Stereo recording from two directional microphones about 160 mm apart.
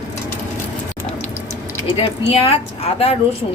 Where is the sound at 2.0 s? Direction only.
35° left (ahead or behind).